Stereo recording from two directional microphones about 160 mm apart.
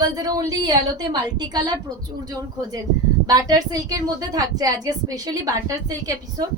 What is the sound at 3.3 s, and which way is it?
A woman's voice, 25° right (ahead or behind).